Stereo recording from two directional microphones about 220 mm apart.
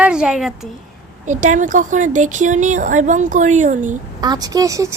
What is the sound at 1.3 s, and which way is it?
Speech, 35° right (ahead or behind).